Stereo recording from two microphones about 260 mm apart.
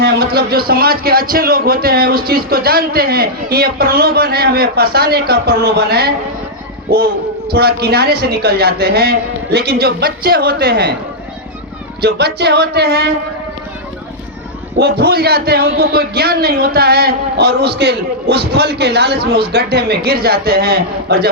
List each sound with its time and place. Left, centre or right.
0.0 s a man's voice: right
7.5 s a man's voice: right
12.0 s a man's voice: right
14.8 s a man's voice: right